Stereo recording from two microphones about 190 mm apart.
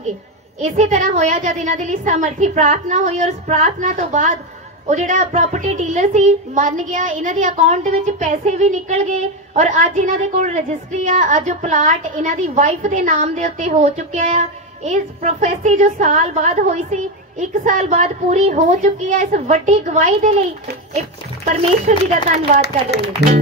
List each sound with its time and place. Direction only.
0.6 s a child's voice: 40° right (ahead or behind)
21.5 s a child's voice: 35° right (ahead or behind)